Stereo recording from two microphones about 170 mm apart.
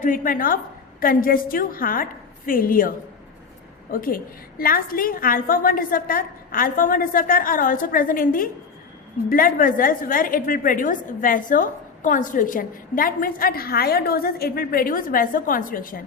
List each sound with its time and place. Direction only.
0.0 s a woman's voice: 55° left (ahead or behind)
3.9 s a woman's voice: 55° left (ahead or behind)